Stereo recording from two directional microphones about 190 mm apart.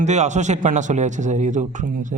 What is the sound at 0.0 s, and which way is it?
A man's voice, 40° right (ahead or behind).